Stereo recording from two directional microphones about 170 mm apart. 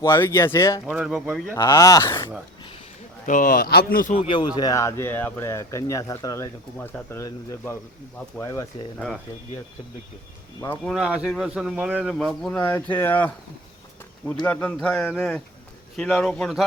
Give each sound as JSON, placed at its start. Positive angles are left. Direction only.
{"t": 0.0, "sound": "speech", "side_deg": 15}
{"t": 0.9, "sound": "speech", "side_deg": -5}
{"t": 1.5, "sound": "speech", "side_deg": 20}
{"t": 3.2, "sound": "speech", "side_deg": 50}
{"t": 4.3, "sound": "speech", "side_deg": 25}
{"t": 9.0, "sound": "speech", "side_deg": 0}
{"t": 10.6, "sound": "speech", "side_deg": 10}
{"t": 10.9, "sound": "speech", "side_deg": -5}
{"t": 12.1, "sound": "speech", "side_deg": 0}
{"t": 14.4, "sound": "speech", "side_deg": 10}